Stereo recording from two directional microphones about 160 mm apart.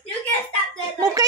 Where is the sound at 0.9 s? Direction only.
20° right (ahead or behind).